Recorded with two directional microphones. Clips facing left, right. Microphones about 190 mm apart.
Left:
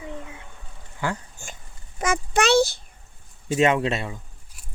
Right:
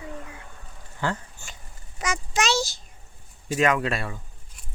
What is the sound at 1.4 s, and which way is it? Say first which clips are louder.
A child's voice: left 3 dB; 50° left (ahead or behind).